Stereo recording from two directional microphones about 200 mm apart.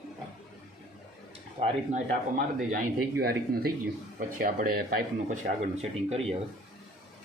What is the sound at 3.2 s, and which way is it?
A man's voice, 50° right (ahead or behind).